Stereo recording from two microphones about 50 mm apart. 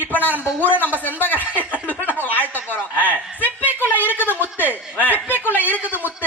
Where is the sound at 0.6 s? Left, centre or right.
Left.